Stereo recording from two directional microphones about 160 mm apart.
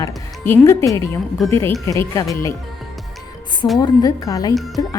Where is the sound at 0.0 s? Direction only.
15° left (ahead or behind).